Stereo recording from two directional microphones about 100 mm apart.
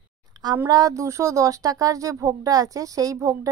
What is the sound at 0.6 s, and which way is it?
Speech, 35° right (ahead or behind).